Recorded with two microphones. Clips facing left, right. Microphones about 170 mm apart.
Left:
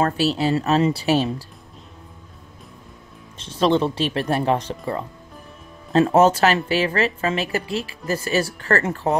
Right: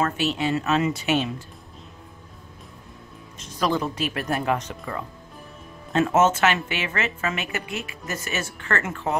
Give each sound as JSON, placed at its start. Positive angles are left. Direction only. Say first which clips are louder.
{"t": 0.0, "sound": "a woman's voice", "louder": "left 4 dB", "side_deg": 35}
{"t": 3.3, "sound": "a woman's voice", "louder": "left 6 dB", "side_deg": 30}